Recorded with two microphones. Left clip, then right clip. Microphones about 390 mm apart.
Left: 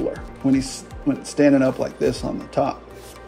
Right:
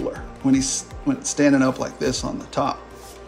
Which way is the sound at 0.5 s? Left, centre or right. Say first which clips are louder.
Right 3 dB; right.